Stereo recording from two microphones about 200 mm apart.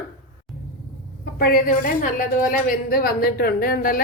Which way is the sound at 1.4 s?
45° left (ahead or behind).